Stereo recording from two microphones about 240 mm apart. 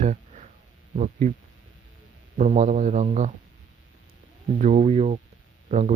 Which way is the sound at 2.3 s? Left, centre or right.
Right.